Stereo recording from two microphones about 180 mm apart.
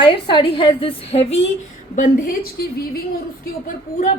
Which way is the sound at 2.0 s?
50° left (ahead or behind).